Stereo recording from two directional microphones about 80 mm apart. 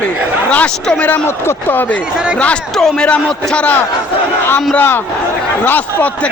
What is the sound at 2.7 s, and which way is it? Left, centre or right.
A man's voice, centre.